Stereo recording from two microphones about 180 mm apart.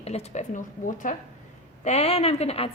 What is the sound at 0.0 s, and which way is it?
A woman's voice, 35° left (ahead or behind).